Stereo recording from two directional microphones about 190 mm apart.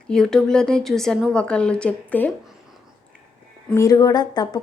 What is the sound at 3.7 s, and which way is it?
Speech, 20° left (ahead or behind).